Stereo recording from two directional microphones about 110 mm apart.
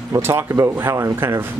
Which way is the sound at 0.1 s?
20° right (ahead or behind).